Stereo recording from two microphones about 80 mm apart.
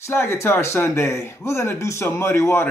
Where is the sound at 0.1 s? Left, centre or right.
Left.